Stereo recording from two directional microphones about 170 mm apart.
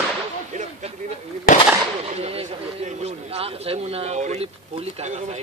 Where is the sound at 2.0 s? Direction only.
35° right (ahead or behind).